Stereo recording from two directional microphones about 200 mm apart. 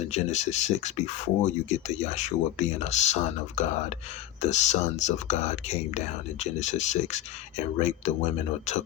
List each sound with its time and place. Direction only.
0.1 s speech: 35° left (ahead or behind)